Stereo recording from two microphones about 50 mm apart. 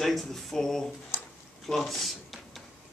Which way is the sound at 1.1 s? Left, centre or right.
Left.